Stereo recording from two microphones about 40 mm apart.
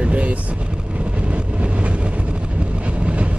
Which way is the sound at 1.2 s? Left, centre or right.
Right.